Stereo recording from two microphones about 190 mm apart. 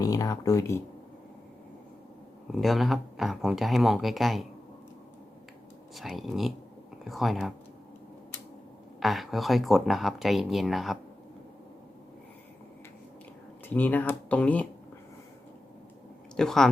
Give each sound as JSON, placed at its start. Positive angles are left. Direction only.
{"t": 0.0, "sound": "speech", "side_deg": 20}
{"t": 2.5, "sound": "speech", "side_deg": 0}
{"t": 5.9, "sound": "speech", "side_deg": 0}
{"t": 9.0, "sound": "speech", "side_deg": 0}
{"t": 13.7, "sound": "speech", "side_deg": 10}
{"t": 16.4, "sound": "speech", "side_deg": 0}